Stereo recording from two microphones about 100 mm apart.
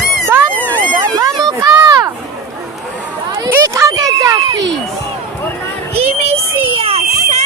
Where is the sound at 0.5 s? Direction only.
15° left (ahead or behind).